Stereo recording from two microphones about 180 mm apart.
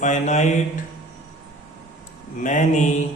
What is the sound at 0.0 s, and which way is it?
Mantra, 40° left (ahead or behind).